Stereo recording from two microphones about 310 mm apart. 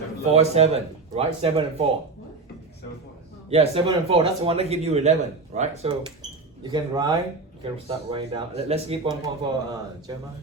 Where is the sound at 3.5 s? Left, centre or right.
Centre.